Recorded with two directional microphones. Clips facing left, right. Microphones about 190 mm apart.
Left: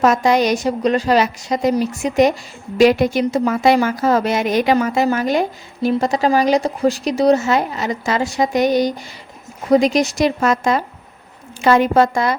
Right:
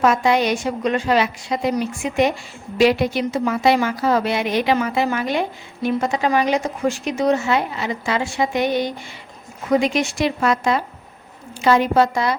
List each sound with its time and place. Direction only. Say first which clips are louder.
0.0 s a woman's voice: left 2 dB; 40° left (ahead or behind)